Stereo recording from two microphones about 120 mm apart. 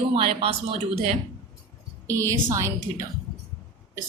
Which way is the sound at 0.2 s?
50° right (ahead or behind).